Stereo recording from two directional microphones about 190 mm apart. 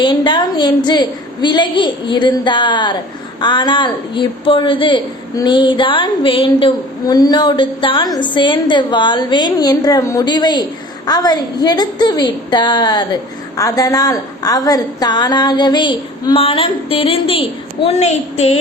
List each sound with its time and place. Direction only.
0.0 s a man's voice: 25° left (ahead or behind)